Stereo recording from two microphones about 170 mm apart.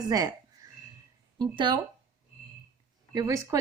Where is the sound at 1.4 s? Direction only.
30° right (ahead or behind).